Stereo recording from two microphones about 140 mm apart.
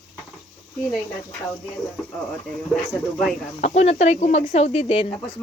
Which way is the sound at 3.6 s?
50° left (ahead or behind).